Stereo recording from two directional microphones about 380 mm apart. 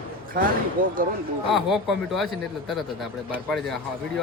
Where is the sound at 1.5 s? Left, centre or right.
Centre.